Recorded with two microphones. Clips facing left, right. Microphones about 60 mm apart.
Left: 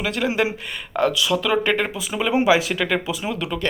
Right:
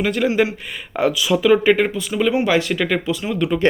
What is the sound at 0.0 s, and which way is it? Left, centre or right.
Speech, centre.